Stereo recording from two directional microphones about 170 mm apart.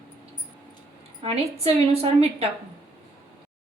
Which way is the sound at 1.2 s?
35° right (ahead or behind).